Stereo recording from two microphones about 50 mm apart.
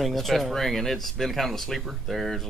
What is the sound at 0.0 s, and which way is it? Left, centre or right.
Speech, centre.